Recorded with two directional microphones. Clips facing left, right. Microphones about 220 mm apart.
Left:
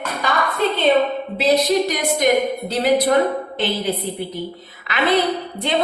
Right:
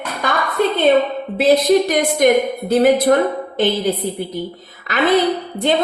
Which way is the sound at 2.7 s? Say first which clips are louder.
Right 5 dB; 50° right (ahead or behind).